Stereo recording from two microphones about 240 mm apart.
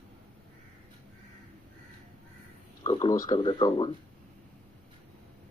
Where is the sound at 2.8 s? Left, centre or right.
Left.